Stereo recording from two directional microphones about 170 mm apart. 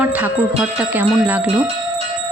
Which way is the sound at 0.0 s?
10° right (ahead or behind).